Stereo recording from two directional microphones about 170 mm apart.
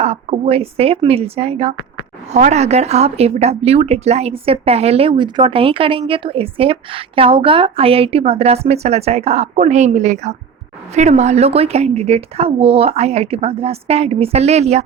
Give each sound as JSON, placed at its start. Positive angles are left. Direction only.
{"t": 0.0, "sound": "speech", "side_deg": -35}